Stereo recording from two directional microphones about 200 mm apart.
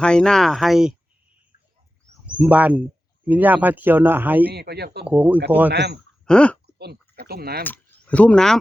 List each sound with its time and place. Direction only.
0.0 s speech: 5° left (ahead or behind)
2.4 s speech: 5° right (ahead or behind)
4.4 s speech: 50° right (ahead or behind)
5.0 s speech: 5° right (ahead or behind)
5.7 s speech: 55° right (ahead or behind)
6.2 s speech: 5° left (ahead or behind)
7.2 s speech: 50° right (ahead or behind)
7.6 s speech: 10° left (ahead or behind)